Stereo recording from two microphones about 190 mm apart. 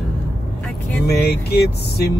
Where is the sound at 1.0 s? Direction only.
55° left (ahead or behind).